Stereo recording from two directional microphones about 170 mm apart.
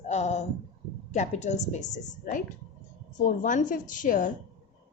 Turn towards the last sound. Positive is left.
turn(degrees=50)  # may be behind; listen again after turning